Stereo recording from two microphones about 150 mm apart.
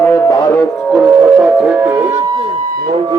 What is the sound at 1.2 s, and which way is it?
Music, 10° right (ahead or behind).